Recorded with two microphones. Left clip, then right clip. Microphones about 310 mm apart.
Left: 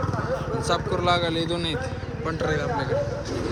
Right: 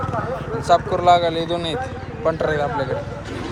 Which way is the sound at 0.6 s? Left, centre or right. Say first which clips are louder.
Right 10 dB; centre.